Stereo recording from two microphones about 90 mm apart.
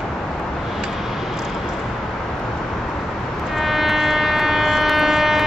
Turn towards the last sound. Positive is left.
turn(degrees=0)  # may be behind; listen again after turning